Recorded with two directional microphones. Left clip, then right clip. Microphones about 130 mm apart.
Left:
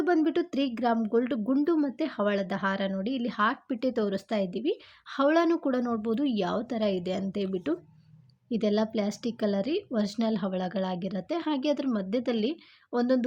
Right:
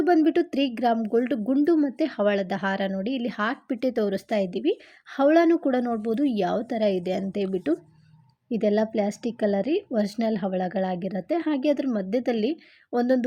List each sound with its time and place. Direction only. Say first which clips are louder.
0.0 s a woman's voice: right 5 dB; 25° right (ahead or behind)